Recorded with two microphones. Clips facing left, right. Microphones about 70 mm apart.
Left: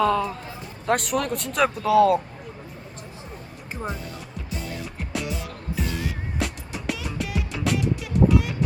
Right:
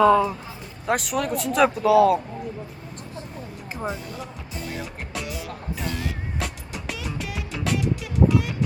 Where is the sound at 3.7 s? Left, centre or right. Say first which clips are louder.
Right 1 dB; centre.